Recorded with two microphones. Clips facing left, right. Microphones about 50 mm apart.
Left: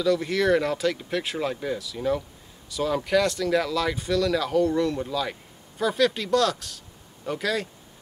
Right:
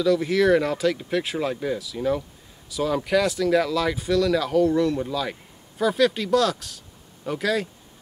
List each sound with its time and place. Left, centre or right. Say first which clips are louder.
0.0 s speech: right 3 dB; centre